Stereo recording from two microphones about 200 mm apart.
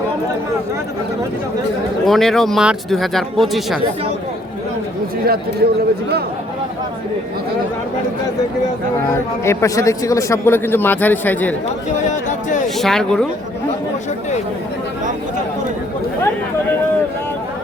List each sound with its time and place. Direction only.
2.0 s speech: centre (ahead or behind)
5.2 s speech: 50° right (ahead or behind)
9.4 s a man's voice: 15° left (ahead or behind)
12.6 s speech: centre (ahead or behind)